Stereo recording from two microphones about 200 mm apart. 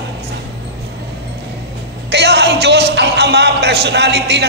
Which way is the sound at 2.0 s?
55° right (ahead or behind).